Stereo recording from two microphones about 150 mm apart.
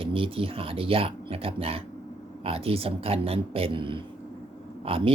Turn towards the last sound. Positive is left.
turn(degrees=-40)  # may be behind; listen again after turning